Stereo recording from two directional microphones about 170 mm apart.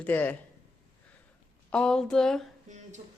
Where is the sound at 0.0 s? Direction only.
10° left (ahead or behind).